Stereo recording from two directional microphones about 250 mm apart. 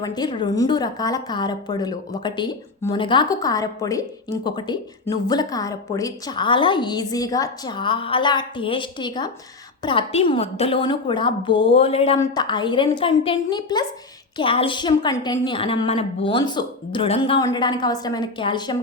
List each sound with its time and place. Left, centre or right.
0.0 s a woman's voice: centre